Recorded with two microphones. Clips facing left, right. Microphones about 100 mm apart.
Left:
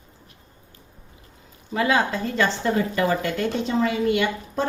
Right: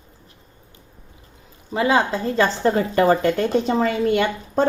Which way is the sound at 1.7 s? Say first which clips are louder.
Right 3 dB; 30° right (ahead or behind).